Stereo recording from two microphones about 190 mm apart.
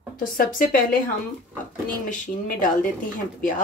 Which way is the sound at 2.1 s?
45° left (ahead or behind).